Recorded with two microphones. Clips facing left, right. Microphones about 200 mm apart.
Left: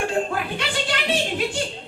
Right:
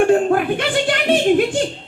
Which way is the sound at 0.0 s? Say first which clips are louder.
Right 10 dB; 55° right (ahead or behind).